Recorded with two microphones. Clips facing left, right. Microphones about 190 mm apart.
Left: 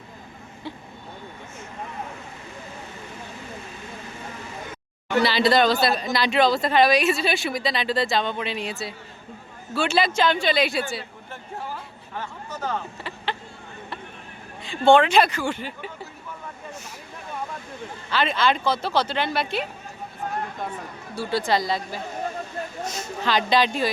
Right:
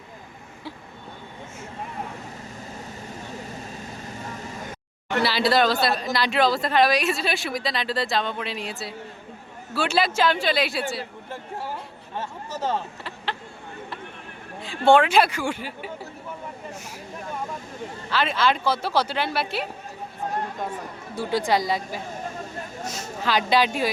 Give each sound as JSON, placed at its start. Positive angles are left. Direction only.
{"t": 3.7, "sound": "vehicle", "side_deg": -40}
{"t": 5.2, "sound": "a woman's voice", "side_deg": -5}
{"t": 12.1, "sound": "speech", "side_deg": -25}
{"t": 14.6, "sound": "speech", "side_deg": -5}
{"t": 18.1, "sound": "a woman's voice", "side_deg": -5}
{"t": 21.2, "sound": "speech", "side_deg": -15}
{"t": 23.2, "sound": "speech", "side_deg": -5}